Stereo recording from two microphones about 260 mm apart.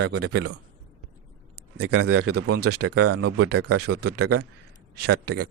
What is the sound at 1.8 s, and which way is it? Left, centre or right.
Speech, right.